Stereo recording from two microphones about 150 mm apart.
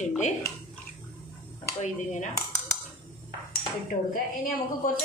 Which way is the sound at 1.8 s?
55° left (ahead or behind).